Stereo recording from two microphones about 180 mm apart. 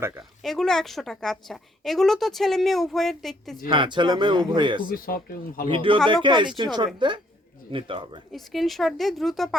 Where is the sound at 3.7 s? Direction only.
25° right (ahead or behind).